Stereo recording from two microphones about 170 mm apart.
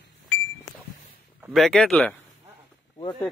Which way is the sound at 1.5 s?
Centre (ahead or behind).